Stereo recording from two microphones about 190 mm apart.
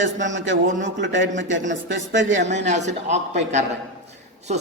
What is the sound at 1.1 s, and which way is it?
A man's voice, 75° right (ahead or behind).